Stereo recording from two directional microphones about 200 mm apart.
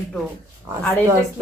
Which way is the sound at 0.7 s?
15° right (ahead or behind).